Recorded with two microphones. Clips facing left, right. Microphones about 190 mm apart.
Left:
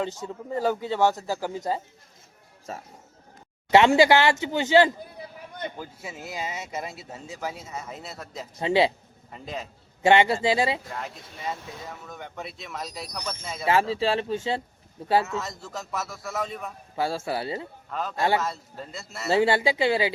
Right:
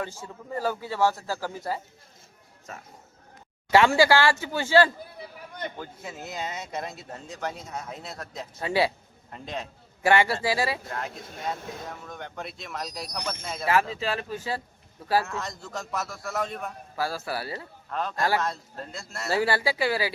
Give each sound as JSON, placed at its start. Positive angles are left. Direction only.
{"t": 0.5, "sound": "speech", "side_deg": 20}
{"t": 2.7, "sound": "speech", "side_deg": 30}
{"t": 5.7, "sound": "speech", "side_deg": 5}
{"t": 8.6, "sound": "speech", "side_deg": 20}
{"t": 9.3, "sound": "speech", "side_deg": 0}
{"t": 10.0, "sound": "speech", "side_deg": 20}
{"t": 10.8, "sound": "speech", "side_deg": 0}
{"t": 13.9, "sound": "speech", "side_deg": 30}
{"t": 15.3, "sound": "speech", "side_deg": 5}
{"t": 17.0, "sound": "speech", "side_deg": 25}
{"t": 17.9, "sound": "speech", "side_deg": 5}
{"t": 19.3, "sound": "speech", "side_deg": 25}